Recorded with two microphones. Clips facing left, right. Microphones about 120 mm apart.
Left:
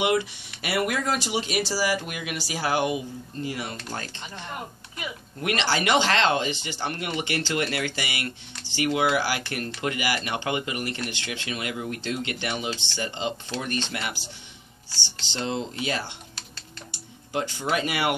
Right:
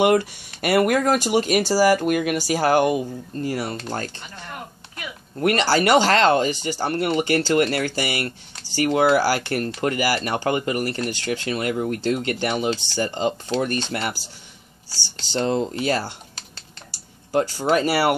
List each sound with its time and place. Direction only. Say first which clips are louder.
0.0 s speech: right 6 dB; 45° right (ahead or behind)
5.4 s speech: right 7 dB; 40° right (ahead or behind)
15.3 s speech: right 7 dB; 45° right (ahead or behind)